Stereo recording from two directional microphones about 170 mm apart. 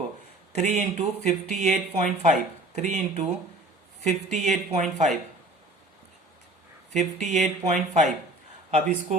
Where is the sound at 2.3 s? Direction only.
40° right (ahead or behind).